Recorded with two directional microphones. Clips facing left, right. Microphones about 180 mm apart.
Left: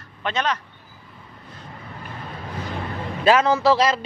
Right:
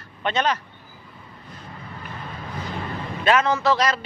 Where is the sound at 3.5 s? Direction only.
10° left (ahead or behind).